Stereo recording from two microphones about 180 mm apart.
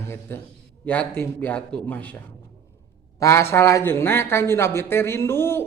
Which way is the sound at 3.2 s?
15° left (ahead or behind).